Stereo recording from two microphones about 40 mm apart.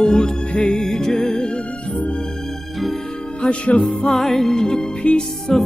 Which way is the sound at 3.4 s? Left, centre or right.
Left.